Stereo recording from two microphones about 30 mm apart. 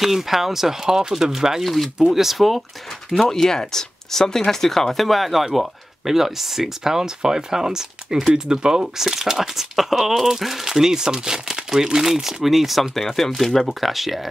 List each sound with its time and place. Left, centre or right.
0.0 s speech: centre
1.6 s speech: centre
3.1 s speech: centre
12.9 s speech: centre